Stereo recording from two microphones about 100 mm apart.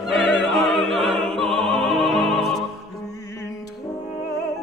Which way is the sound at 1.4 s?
70° right (ahead or behind).